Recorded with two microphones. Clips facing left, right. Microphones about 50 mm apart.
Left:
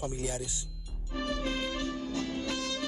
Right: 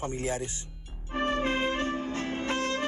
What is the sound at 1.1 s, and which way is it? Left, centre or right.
Music, right.